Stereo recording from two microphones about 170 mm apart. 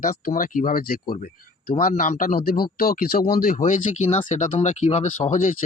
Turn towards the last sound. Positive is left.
turn(degrees=50)  # may be behind; listen again after turning